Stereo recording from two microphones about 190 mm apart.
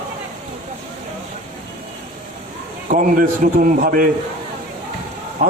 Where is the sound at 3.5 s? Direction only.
45° right (ahead or behind).